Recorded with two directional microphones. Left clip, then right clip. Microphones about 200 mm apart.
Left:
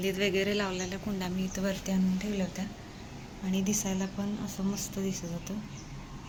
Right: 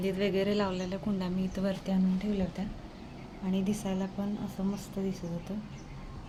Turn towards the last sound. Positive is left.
turn(degrees=-10)  # may be behind; listen again after turning